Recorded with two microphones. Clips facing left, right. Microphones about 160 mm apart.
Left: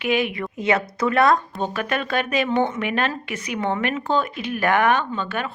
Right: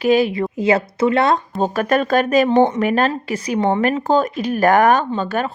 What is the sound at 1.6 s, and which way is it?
Speech, 40° right (ahead or behind).